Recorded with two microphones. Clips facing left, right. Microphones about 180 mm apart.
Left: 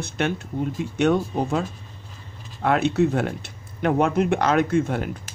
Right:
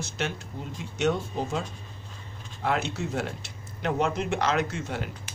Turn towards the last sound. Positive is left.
turn(degrees=50)  # may be behind; listen again after turning